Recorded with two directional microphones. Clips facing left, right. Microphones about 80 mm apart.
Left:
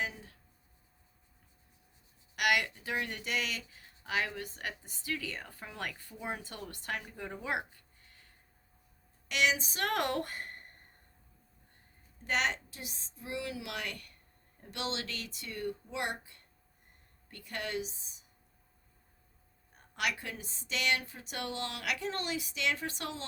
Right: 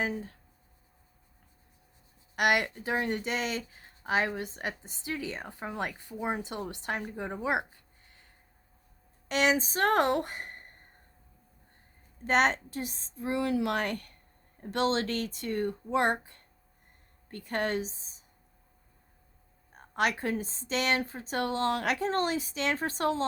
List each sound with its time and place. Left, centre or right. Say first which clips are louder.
0.0 s a woman's voice: right 6 dB; right
2.3 s speech: right 4 dB; right
9.3 s a woman's voice: right 5 dB; right
12.2 s a woman's voice: right 7 dB; right
19.7 s a woman's voice: right 6 dB; right